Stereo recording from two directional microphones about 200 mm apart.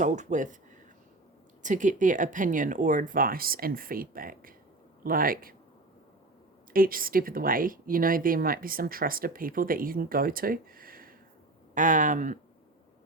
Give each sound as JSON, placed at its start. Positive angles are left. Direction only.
{"t": 0.0, "sound": "speech", "side_deg": -35}
{"t": 1.6, "sound": "speech", "side_deg": -40}
{"t": 6.7, "sound": "speech", "side_deg": -45}